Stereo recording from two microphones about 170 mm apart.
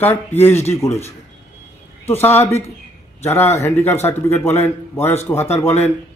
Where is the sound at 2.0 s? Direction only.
15° left (ahead or behind).